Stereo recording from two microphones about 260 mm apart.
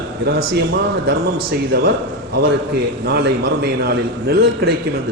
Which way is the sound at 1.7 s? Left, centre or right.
Right.